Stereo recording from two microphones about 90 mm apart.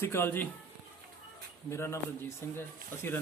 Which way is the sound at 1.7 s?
30° left (ahead or behind).